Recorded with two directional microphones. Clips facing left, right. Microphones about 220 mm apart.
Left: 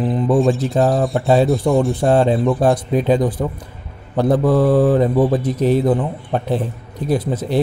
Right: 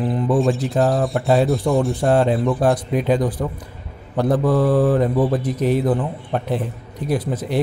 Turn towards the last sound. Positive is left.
turn(degrees=25)  # may be behind; listen again after turning